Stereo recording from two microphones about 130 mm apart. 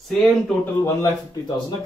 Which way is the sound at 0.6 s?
20° left (ahead or behind).